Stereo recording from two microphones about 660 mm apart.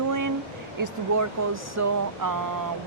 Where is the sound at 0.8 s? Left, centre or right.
Right.